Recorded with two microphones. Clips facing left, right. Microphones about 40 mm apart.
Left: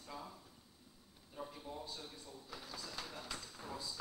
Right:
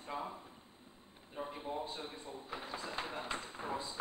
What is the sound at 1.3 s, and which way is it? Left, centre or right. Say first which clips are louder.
Drawer open or close: right 6 dB; right.